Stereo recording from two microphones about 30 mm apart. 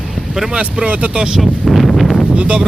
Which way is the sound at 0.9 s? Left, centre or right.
Right.